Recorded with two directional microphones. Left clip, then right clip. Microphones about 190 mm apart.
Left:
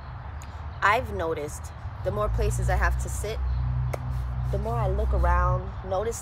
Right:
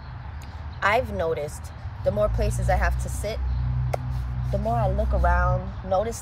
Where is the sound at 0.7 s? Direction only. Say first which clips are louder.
Right 1 dB; 10° left (ahead or behind).